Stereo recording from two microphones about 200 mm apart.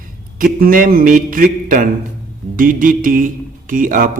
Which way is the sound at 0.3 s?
45° right (ahead or behind).